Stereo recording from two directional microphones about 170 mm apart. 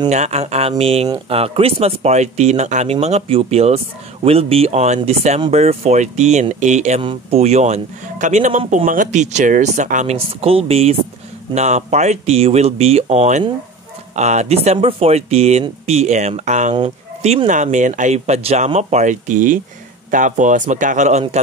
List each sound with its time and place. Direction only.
0.1 s speech: 40° right (ahead or behind)